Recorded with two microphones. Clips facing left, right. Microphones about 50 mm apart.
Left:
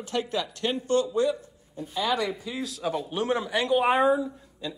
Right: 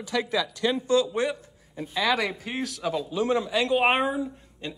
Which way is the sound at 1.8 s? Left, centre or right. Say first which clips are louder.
Right 2 dB; right.